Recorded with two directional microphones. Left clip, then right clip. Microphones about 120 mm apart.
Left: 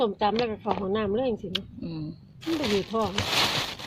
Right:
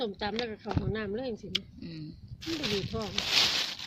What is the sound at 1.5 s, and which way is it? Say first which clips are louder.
Speech: left 2 dB; 35° right (ahead or behind).